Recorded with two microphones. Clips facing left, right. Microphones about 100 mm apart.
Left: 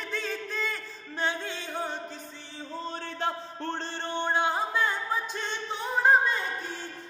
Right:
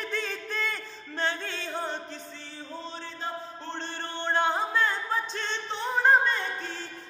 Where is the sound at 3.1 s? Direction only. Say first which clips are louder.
Left 5 dB; 70° left (ahead or behind).